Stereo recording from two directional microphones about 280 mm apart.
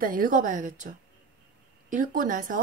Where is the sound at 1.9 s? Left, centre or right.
Right.